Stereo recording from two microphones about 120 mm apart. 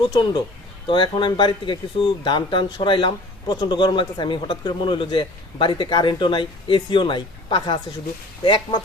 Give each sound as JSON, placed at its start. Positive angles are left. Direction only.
{"t": 0.1, "sound": "a man's voice", "side_deg": 40}